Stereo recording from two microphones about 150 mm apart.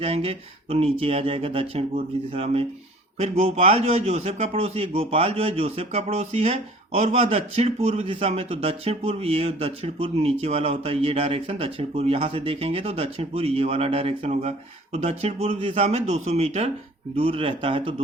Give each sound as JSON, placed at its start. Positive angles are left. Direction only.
{"t": 0.0, "sound": "a man's voice", "side_deg": -40}